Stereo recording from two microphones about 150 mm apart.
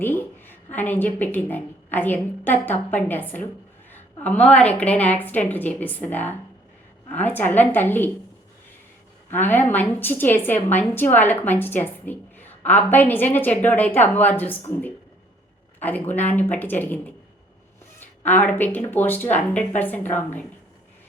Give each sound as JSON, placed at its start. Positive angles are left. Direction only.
{"t": 0.0, "sound": "a woman's voice", "side_deg": 15}
{"t": 9.3, "sound": "a woman's voice", "side_deg": 15}
{"t": 18.3, "sound": "a woman's voice", "side_deg": 10}